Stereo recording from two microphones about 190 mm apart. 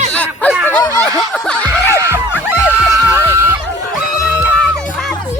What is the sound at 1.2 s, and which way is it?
Snicker, 5° left (ahead or behind).